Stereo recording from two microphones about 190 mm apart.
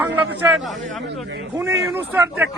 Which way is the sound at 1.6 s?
15° right (ahead or behind).